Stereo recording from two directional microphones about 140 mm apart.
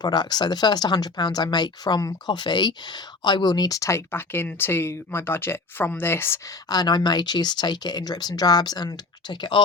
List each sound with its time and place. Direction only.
0.0 s speech: 30° left (ahead or behind)
6.7 s speech: 30° left (ahead or behind)